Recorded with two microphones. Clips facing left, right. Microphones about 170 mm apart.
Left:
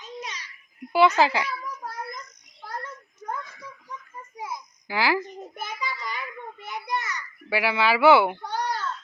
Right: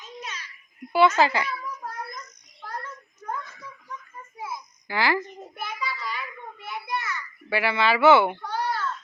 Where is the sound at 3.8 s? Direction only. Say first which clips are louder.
Even; 15° left (ahead or behind).